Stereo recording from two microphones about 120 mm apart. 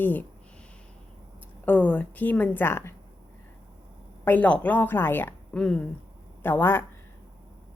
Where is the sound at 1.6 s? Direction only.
15° left (ahead or behind).